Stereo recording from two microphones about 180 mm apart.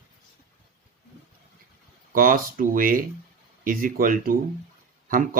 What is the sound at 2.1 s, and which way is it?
Speech, 50° right (ahead or behind).